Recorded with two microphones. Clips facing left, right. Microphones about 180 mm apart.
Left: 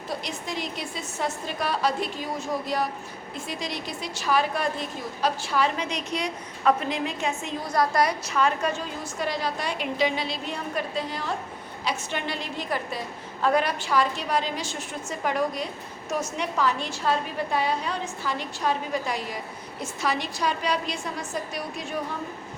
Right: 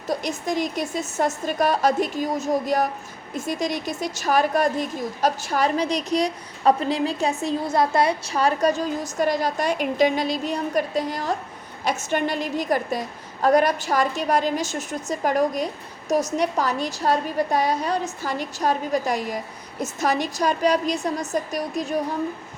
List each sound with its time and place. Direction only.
0.1 s a woman's voice: 45° right (ahead or behind)